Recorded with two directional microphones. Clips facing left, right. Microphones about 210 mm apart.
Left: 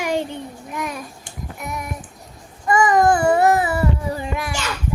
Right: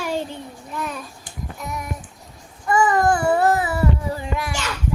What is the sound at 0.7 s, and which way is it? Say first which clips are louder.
Babbling: left 1 dB; 10° left (ahead or behind).